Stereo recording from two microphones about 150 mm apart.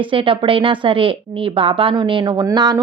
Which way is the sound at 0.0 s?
35° right (ahead or behind).